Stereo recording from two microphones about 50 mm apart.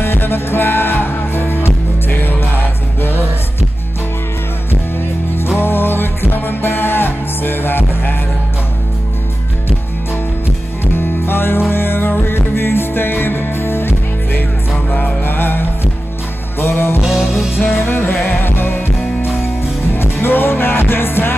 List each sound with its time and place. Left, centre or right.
0.0 s music: left
5.6 s music: left
11.0 s music: left
17.0 s music: centre
17.6 s music: left